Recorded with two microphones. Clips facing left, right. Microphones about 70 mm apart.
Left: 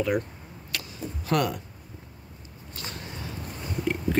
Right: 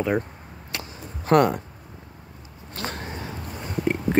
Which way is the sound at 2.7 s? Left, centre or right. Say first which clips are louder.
Right 7 dB; right.